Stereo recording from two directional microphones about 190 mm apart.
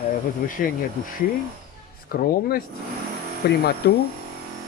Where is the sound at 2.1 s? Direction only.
50° left (ahead or behind).